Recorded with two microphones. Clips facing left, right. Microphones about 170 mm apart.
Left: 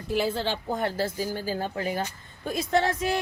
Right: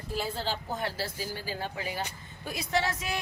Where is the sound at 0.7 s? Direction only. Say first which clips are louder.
Left 6 dB; 50° left (ahead or behind).